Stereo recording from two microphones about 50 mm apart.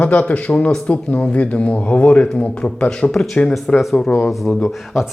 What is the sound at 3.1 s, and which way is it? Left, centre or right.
Speech, centre.